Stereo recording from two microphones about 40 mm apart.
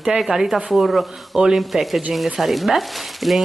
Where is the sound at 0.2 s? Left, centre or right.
Centre.